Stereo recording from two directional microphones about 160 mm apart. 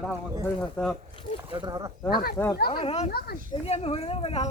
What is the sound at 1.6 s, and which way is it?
Speech, 25° right (ahead or behind).